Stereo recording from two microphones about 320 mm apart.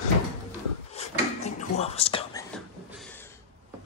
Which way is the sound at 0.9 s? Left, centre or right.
Left.